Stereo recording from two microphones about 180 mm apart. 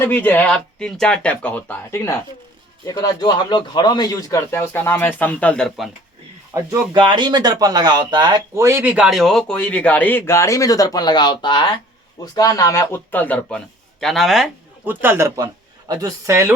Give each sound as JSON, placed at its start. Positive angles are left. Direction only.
{"t": 0.0, "sound": "a man's voice", "side_deg": 10}
{"t": 6.5, "sound": "a man's voice", "side_deg": -20}